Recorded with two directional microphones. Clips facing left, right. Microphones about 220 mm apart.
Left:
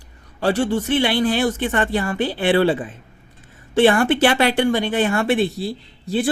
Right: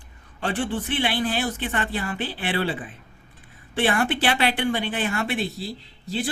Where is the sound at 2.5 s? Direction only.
60° left (ahead or behind).